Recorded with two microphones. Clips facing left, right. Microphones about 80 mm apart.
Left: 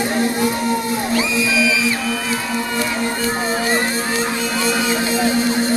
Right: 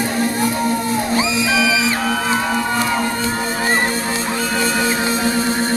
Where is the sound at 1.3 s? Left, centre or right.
Right.